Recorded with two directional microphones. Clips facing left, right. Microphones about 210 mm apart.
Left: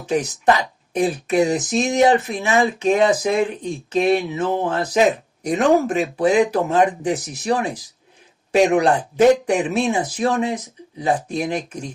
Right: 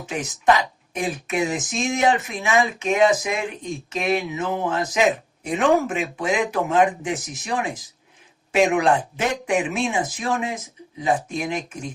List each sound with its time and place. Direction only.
0.0 s speech: 35° left (ahead or behind)